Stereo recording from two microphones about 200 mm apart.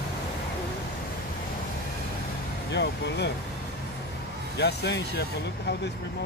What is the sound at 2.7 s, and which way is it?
Speech, 60° left (ahead or behind).